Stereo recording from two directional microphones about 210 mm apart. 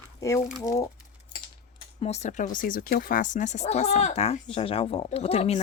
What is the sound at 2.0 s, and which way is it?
Speech, 30° left (ahead or behind).